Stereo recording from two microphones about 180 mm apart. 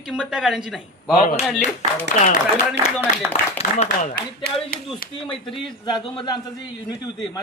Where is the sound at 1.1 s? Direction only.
45° left (ahead or behind).